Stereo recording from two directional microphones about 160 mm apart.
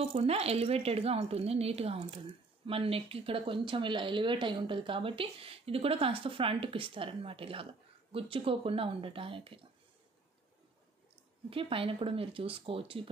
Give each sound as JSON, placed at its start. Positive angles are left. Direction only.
{"t": 0.0, "sound": "speech", "side_deg": -40}
{"t": 11.5, "sound": "speech", "side_deg": -35}